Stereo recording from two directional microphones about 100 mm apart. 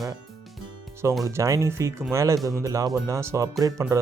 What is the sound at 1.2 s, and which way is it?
Speech, 35° right (ahead or behind).